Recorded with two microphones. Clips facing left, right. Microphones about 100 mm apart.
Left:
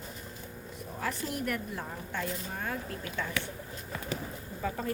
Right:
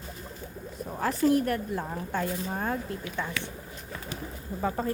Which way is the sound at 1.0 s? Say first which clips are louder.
Right 11 dB; 40° right (ahead or behind).